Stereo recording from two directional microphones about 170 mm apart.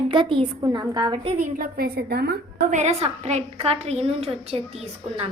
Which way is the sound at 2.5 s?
45° right (ahead or behind).